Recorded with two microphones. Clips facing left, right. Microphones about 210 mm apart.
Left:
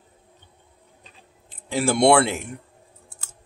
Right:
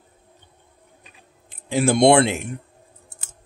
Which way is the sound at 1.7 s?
20° right (ahead or behind).